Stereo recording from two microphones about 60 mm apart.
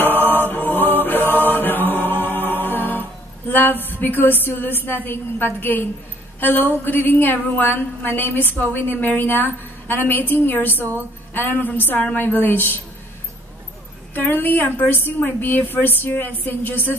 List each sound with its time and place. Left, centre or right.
0.0 s chant: left
3.9 s a woman's voice: left
14.1 s a woman's voice: left